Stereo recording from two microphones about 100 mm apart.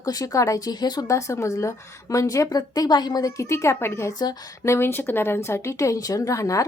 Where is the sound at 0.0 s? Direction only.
35° left (ahead or behind).